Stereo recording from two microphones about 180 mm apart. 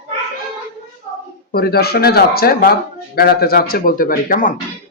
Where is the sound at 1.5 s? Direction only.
60° left (ahead or behind).